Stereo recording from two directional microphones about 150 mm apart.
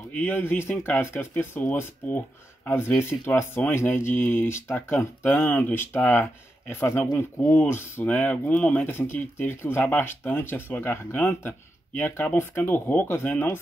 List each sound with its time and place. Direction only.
0.1 s speech: 10° left (ahead or behind)